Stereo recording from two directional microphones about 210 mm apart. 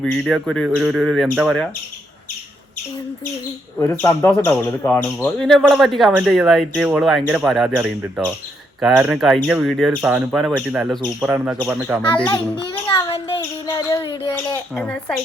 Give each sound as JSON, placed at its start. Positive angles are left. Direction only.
{"t": 0.0, "sound": "speech", "side_deg": 0}
{"t": 3.8, "sound": "speech", "side_deg": 10}
{"t": 12.5, "sound": "a sound", "side_deg": 25}
{"t": 13.7, "sound": "speech", "side_deg": 15}
{"t": 14.8, "sound": "speech", "side_deg": 5}